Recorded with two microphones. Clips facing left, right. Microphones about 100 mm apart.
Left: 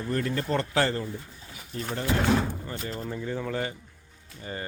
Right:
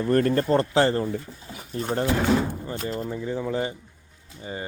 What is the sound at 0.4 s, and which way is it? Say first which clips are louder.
Speech: right 6 dB; 35° right (ahead or behind).